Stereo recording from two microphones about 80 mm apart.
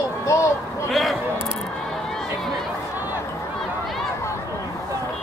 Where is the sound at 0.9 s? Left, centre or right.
Centre.